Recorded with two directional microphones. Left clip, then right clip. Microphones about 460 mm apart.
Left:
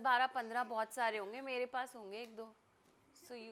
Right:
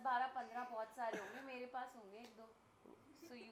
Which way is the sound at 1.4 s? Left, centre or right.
Left.